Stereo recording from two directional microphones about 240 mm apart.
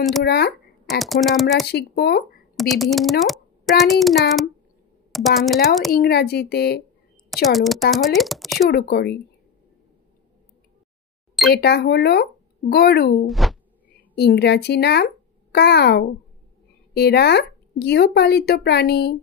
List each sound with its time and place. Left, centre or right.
0.2 s speech: left
0.8 s a child's voice: centre
1.7 s speech: left
2.7 s a child's voice: centre
5.9 s speech: left
7.4 s a child's voice: centre
8.6 s speech: left
11.5 s speech: left
13.3 s a sound: centre
14.1 s speech: left